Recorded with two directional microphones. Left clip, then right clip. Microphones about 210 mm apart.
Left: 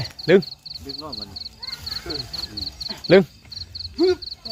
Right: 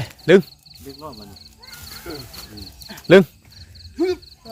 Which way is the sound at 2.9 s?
30° right (ahead or behind).